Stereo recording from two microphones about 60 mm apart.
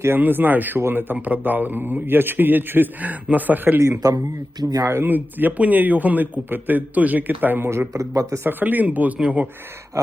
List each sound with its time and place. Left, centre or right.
0.2 s a man's voice: right
4.0 s speech: right
5.0 s a man's voice: right
7.7 s a man's voice: right
8.1 s speech: right
8.4 s a man's voice: right